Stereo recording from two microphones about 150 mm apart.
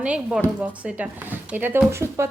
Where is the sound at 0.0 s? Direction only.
10° right (ahead or behind).